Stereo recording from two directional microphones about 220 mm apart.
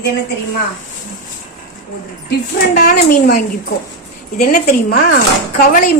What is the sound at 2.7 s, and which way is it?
A woman's voice, 45° left (ahead or behind).